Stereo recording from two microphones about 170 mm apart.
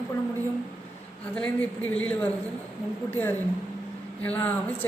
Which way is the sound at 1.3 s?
10° left (ahead or behind).